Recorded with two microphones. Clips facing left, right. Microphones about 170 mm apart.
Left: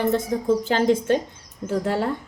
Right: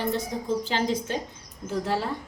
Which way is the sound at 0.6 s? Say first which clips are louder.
Left 6 dB; 50° left (ahead or behind).